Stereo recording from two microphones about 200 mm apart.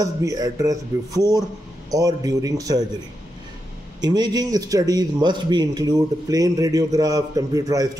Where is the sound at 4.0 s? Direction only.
20° right (ahead or behind).